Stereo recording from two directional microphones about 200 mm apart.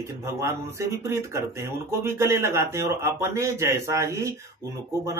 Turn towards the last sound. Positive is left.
turn(degrees=-15)  # may be behind; listen again after turning